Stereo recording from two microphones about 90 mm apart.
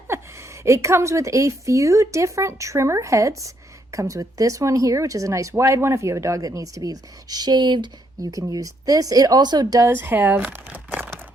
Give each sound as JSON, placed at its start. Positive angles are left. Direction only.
{"t": 0.1, "sound": "speech", "side_deg": -30}
{"t": 8.2, "sound": "speech", "side_deg": -40}
{"t": 9.8, "sound": "speech", "side_deg": -25}